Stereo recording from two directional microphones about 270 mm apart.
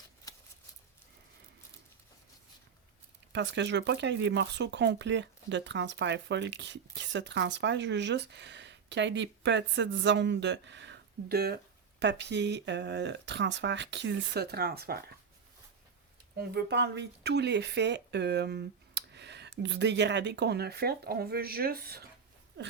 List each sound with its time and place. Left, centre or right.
3.3 s speech: right
16.4 s speech: right